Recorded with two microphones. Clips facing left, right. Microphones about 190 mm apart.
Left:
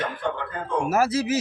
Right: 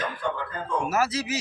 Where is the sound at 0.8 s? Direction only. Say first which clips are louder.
Left 5 dB; 50° left (ahead or behind).